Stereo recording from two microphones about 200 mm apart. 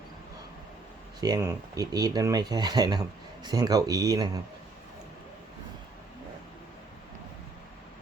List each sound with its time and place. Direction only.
1.2 s speech: 15° right (ahead or behind)